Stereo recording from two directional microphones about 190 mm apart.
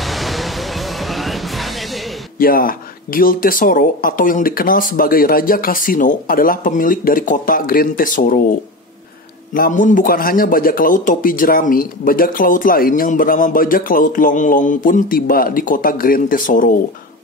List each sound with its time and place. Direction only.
0.1 s a sound: centre (ahead or behind)
2.3 s a man's voice: 50° left (ahead or behind)
9.5 s a man's voice: 45° left (ahead or behind)